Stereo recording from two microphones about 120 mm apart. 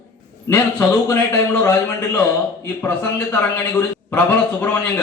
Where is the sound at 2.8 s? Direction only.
15° left (ahead or behind).